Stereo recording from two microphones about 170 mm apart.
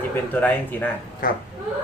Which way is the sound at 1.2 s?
55° left (ahead or behind).